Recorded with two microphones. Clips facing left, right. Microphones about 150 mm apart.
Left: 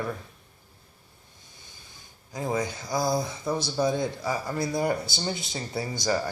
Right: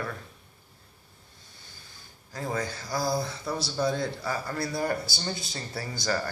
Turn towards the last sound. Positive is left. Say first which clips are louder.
# left 3 dB
turn(degrees=15)  # may be behind; listen again after turning